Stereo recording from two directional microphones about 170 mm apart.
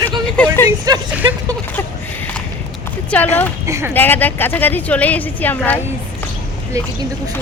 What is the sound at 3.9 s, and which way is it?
A woman's voice, 10° left (ahead or behind).